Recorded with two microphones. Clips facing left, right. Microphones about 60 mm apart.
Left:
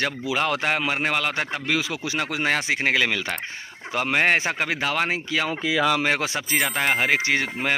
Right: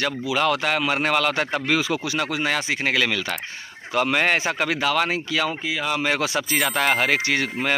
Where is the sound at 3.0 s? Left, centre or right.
Left.